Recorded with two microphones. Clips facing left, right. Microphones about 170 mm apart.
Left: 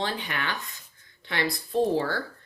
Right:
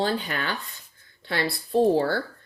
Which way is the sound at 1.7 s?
35° right (ahead or behind).